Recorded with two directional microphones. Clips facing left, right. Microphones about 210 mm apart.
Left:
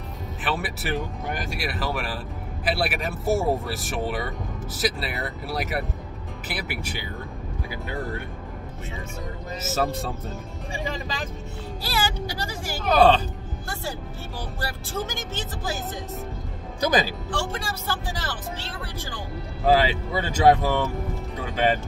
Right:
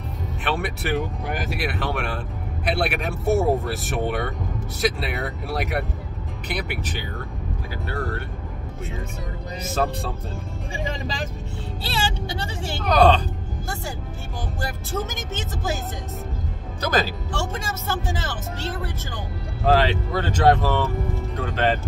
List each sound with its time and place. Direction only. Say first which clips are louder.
0.4 s speech: right 2 dB; centre (ahead or behind)
9.6 s speech: right 1 dB; 5° left (ahead or behind)
11.8 s music: even; 25° right (ahead or behind)
12.7 s speech: even; 5° left (ahead or behind)
14.6 s music: right 2 dB; 20° right (ahead or behind)
16.8 s speech: left 1 dB; 15° left (ahead or behind)
17.5 s music: right 2 dB; 20° right (ahead or behind)
19.6 s speech: right 1 dB; 5° left (ahead or behind)